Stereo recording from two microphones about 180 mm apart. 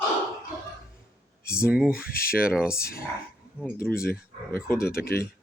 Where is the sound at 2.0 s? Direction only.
55° left (ahead or behind).